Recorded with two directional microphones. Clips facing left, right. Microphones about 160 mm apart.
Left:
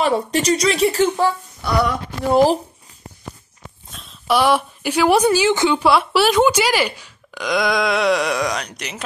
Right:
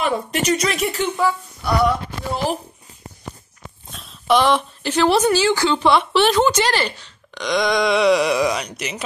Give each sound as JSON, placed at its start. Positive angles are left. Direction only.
{"t": 0.0, "sound": "speech", "side_deg": 35}
{"t": 2.3, "sound": "speech", "side_deg": 35}
{"t": 3.9, "sound": "speech", "side_deg": 0}
{"t": 5.8, "sound": "speech", "side_deg": 5}